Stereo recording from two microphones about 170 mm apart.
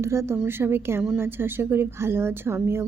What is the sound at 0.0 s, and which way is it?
Speech, 15° right (ahead or behind).